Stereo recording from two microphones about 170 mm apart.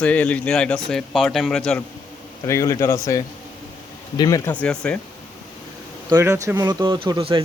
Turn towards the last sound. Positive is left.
turn(degrees=-30)  # may be behind; listen again after turning